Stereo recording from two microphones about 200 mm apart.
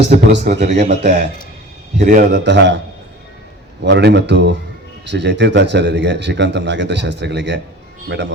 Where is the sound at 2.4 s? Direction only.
60° right (ahead or behind).